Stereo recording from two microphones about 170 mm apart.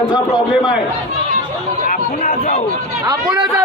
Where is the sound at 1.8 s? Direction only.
50° left (ahead or behind).